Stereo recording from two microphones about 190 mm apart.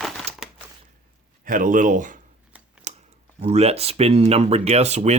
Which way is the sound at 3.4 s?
35° right (ahead or behind).